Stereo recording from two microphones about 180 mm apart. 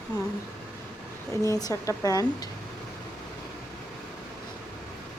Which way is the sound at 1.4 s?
15° left (ahead or behind).